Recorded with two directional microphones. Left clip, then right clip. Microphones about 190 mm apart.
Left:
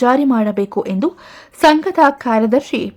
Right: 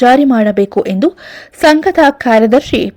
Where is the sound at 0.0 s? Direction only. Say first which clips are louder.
Right 6 dB; 15° right (ahead or behind).